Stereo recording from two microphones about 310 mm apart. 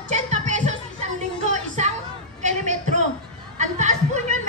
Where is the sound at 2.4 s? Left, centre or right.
Right.